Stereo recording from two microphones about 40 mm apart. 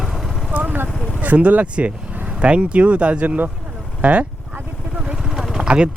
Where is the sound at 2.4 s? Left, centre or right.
Right.